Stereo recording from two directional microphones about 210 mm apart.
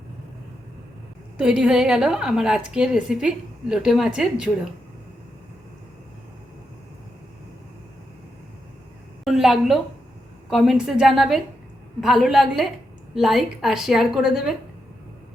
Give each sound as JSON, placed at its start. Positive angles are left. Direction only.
{"t": 1.4, "sound": "a woman's voice", "side_deg": -5}
{"t": 9.2, "sound": "a sound", "side_deg": 0}
{"t": 10.5, "sound": "a woman's voice", "side_deg": 0}